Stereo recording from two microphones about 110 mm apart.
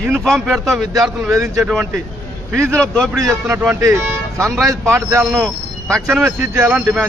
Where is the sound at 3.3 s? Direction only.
25° right (ahead or behind).